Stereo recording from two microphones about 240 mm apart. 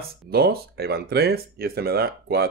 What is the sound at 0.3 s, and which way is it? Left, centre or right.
Speech, right.